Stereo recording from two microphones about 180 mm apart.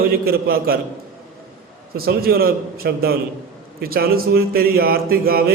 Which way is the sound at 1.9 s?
55° right (ahead or behind).